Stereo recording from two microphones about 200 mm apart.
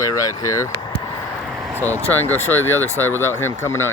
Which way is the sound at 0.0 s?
15° left (ahead or behind).